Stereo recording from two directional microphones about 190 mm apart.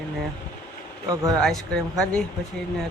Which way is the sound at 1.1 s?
20° right (ahead or behind).